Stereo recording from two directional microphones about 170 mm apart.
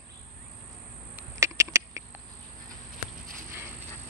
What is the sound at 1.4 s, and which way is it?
Rodents, 15° right (ahead or behind).